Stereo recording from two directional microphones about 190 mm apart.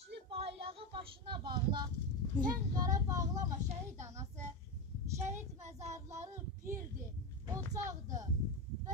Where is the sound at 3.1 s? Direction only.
20° right (ahead or behind).